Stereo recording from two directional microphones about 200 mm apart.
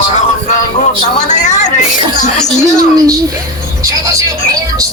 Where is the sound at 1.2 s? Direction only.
35° left (ahead or behind).